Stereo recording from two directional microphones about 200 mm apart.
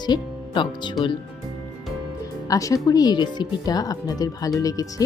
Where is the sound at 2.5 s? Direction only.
15° left (ahead or behind).